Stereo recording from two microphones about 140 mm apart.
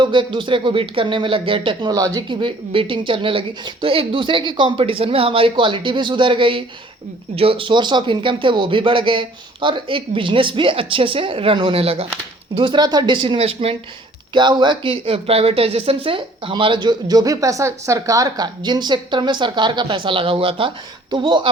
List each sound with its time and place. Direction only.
0.0 s speech: 35° right (ahead or behind)
1.9 s speech: 25° right (ahead or behind); by 13.7 s 45° right (ahead or behind)
14.3 s speech: 35° right (ahead or behind)